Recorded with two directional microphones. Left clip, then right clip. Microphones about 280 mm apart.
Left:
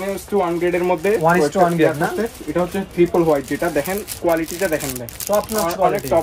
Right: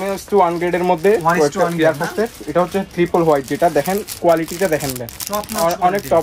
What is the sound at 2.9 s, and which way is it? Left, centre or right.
Speech, right.